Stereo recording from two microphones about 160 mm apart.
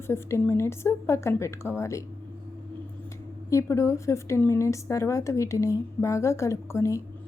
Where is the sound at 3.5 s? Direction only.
20° left (ahead or behind).